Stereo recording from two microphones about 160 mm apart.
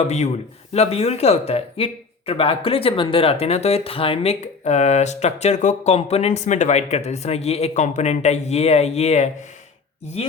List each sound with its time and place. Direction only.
0.0 s a man's voice: 45° left (ahead or behind)